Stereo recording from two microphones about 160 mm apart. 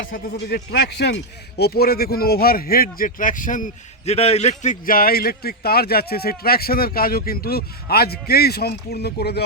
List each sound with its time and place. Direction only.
0.1 s a man's voice: 75° left (ahead or behind)